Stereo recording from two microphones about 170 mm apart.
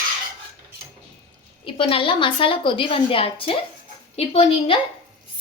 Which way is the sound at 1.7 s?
30° left (ahead or behind).